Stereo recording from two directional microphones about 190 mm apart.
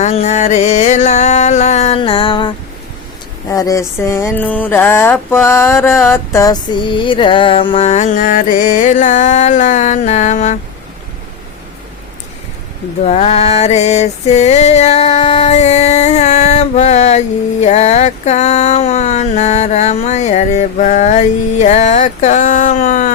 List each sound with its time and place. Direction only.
0.0 s music: 35° left (ahead or behind)
3.5 s a sound: 20° left (ahead or behind)
6.1 s music: 15° left (ahead or behind); by 10.6 s 40° left (ahead or behind)
13.1 s music: 35° left (ahead or behind)